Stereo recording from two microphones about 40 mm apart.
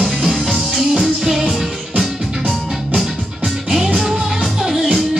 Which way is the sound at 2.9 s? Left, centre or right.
Centre.